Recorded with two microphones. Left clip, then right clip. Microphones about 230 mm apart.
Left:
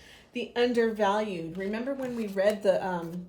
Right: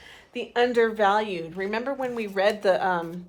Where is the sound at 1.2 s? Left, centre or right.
Right.